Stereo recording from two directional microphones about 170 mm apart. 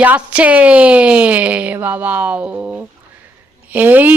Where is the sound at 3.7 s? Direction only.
10° right (ahead or behind).